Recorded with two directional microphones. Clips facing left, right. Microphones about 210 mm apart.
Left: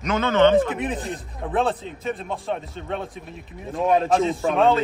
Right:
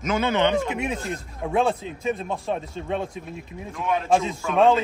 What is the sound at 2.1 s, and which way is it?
Speech, centre (ahead or behind).